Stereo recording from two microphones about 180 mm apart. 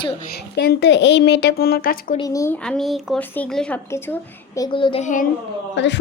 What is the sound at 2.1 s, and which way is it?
Speech, 20° left (ahead or behind).